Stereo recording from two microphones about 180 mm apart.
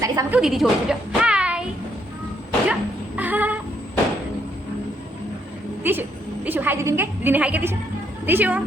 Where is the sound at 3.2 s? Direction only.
10° right (ahead or behind).